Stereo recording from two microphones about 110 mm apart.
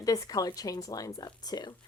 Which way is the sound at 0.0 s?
35° left (ahead or behind).